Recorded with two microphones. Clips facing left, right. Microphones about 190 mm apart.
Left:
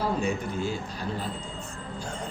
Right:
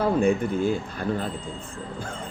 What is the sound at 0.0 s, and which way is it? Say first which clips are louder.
A man's voice: right 7 dB; 55° right (ahead or behind).